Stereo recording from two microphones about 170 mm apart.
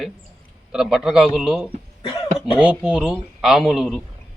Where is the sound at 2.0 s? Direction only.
25° left (ahead or behind).